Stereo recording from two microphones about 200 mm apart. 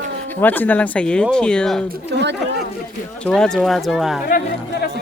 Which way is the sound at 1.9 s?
60° right (ahead or behind).